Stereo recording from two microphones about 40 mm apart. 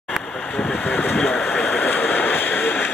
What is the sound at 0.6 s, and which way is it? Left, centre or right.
Vehicle, left.